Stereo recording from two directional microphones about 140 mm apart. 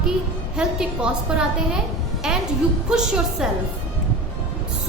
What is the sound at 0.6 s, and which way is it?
A woman's voice, 5° right (ahead or behind).